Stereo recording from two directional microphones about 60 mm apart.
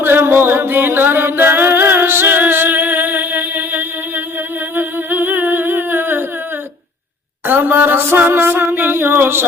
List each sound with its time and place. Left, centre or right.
0.0 s music: right
4.7 s humming: right
7.4 s a sound: right